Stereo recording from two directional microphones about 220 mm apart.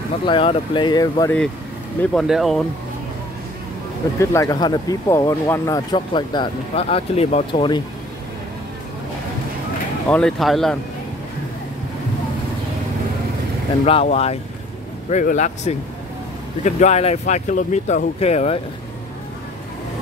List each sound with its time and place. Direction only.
0.2 s speech: 25° left (ahead or behind)
2.0 s speech: centre (ahead or behind)
4.2 s speech: 15° left (ahead or behind)
10.0 s speech: 5° left (ahead or behind)
13.8 s speech: 25° left (ahead or behind)